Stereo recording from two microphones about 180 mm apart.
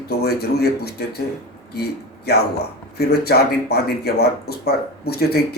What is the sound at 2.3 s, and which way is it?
Speech, 65° left (ahead or behind).